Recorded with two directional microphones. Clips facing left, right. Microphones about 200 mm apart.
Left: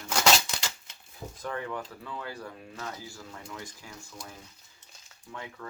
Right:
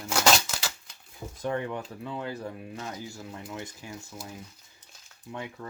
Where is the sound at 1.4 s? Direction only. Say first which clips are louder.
Right 4 dB; 25° right (ahead or behind).